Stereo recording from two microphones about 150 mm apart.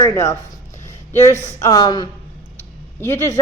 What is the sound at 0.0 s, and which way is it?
Speech, 20° left (ahead or behind).